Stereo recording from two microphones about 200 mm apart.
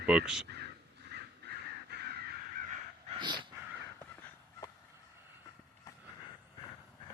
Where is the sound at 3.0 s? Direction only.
25° right (ahead or behind).